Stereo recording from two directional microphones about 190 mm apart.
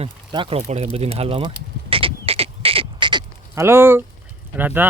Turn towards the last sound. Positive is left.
turn(degrees=-10)  # may be behind; listen again after turning